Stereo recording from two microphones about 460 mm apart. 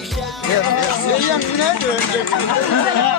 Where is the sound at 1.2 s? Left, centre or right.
Left.